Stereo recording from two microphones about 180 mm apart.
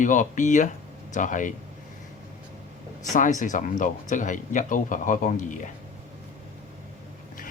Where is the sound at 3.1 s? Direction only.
45° left (ahead or behind).